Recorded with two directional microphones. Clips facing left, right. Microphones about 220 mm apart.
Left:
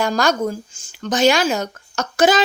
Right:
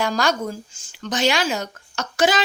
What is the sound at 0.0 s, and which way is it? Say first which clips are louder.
Speech: left 3 dB; 45° left (ahead or behind).